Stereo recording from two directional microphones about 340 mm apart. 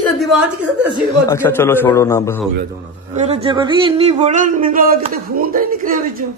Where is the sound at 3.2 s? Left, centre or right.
Centre.